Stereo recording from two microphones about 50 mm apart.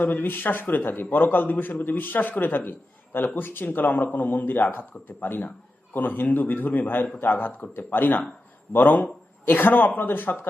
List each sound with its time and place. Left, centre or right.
0.0 s a man's voice: left